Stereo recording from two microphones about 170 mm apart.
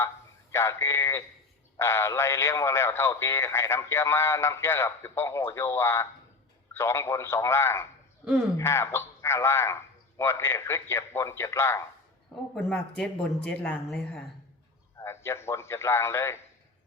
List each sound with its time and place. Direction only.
0.5 s speech: 15° left (ahead or behind)
12.5 s speech: centre (ahead or behind)